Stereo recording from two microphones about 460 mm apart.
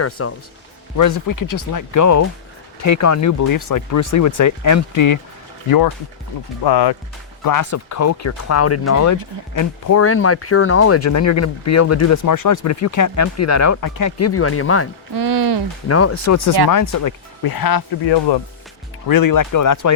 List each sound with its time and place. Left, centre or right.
0.0 s speech: left
0.9 s speech: left
6.7 s speech: left
7.4 s speech: left
15.1 s a sound: right
15.9 s speech: left
19.0 s speech: left